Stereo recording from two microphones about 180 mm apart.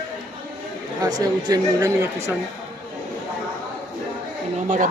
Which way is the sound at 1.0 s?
20° right (ahead or behind).